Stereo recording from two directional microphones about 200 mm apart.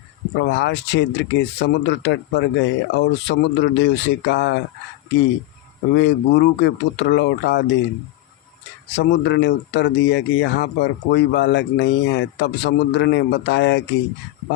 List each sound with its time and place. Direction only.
0.4 s speech: 60° left (ahead or behind)
5.9 s speech: 60° left (ahead or behind)
8.9 s speech: 60° left (ahead or behind)